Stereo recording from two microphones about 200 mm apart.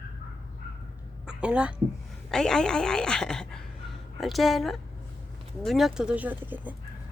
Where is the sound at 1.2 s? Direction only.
5° right (ahead or behind).